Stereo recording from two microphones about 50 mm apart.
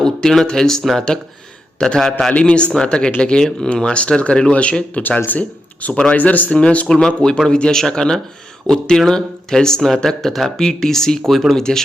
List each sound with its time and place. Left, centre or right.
0.0 s a sound: centre
0.4 s speech: centre
2.3 s speech: left
5.0 s speech: left; by 11.8 s centre